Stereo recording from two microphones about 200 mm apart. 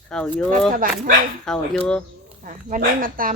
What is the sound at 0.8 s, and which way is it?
Speech, 45° right (ahead or behind).